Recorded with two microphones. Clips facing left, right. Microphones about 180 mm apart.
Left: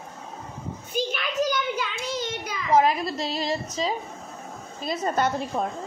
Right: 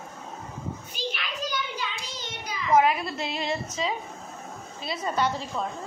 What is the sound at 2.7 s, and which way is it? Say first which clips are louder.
A woman's voice: left 1 dB; 35° left (ahead or behind).